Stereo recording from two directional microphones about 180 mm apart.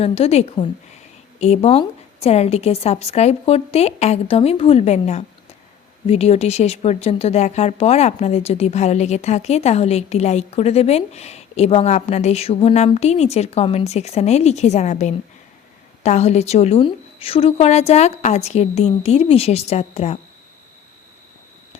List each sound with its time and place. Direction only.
0.0 s speech: 35° left (ahead or behind)